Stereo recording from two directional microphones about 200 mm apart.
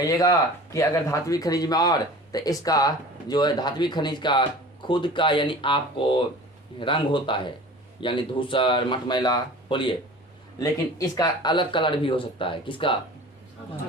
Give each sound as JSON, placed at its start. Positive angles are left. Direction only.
{"t": 0.0, "sound": "speech", "side_deg": 15}